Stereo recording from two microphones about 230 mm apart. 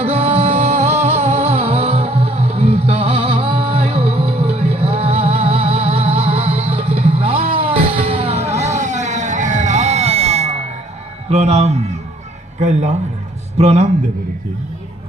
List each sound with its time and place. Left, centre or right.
0.0 s music: right
11.3 s a sound: right
13.6 s a man's voice: right